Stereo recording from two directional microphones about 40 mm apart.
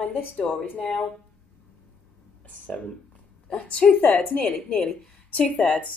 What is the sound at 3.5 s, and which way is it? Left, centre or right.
Speech, left.